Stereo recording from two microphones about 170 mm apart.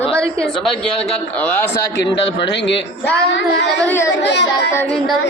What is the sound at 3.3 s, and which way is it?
Speech, 90° left.